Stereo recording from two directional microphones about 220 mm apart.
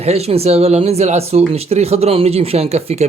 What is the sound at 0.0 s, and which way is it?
Speech, 30° right (ahead or behind).